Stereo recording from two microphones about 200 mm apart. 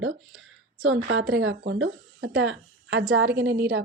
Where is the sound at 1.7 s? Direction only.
85° right.